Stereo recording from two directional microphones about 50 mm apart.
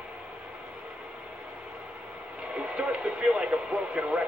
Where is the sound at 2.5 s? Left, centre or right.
Right.